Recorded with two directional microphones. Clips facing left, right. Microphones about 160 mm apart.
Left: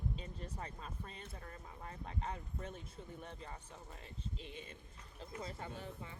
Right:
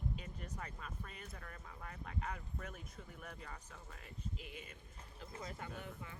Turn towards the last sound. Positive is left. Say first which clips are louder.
# left 1 dB
turn(degrees=30)  # may be behind; listen again after turning